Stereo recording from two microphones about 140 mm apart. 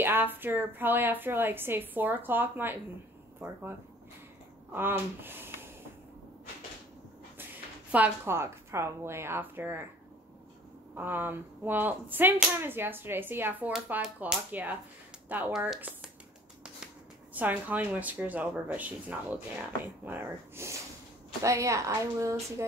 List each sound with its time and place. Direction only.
0.0 s a woman's voice: 15° right (ahead or behind)
4.7 s a woman's voice: 15° right (ahead or behind)
7.9 s a woman's voice: 15° right (ahead or behind)
11.0 s a woman's voice: 15° right (ahead or behind)